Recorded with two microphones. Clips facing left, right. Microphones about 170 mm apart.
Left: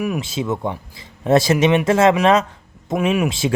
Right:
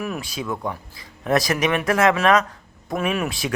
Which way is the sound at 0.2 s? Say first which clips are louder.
Left 5 dB; 25° left (ahead or behind).